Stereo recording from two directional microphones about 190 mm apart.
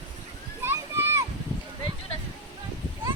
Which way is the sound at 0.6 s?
15° right (ahead or behind).